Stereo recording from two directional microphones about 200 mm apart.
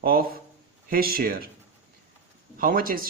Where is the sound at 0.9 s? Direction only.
50° right (ahead or behind).